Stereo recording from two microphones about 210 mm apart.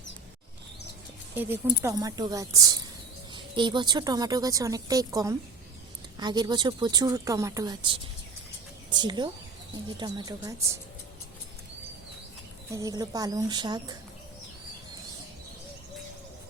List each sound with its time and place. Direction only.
1.4 s a woman's voice: 10° right (ahead or behind)
12.7 s a woman's voice: 15° right (ahead or behind)